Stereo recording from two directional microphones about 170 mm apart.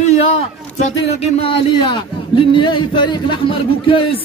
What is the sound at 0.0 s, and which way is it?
A man's voice, 40° left (ahead or behind).